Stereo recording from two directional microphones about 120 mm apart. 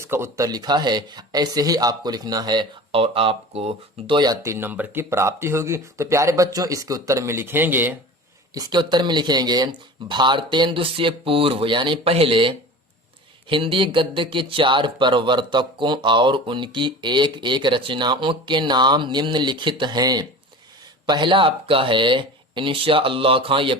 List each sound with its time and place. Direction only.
0.0 s speech: 20° right (ahead or behind)
2.9 s speech: 50° right (ahead or behind)
4.4 s speech: 20° right (ahead or behind)
8.5 s speech: 35° right (ahead or behind)